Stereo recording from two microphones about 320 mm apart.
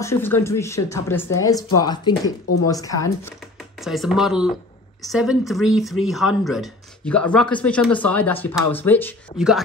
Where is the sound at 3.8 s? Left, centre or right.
Centre.